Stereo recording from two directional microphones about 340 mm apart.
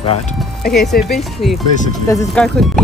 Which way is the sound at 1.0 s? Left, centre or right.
Centre.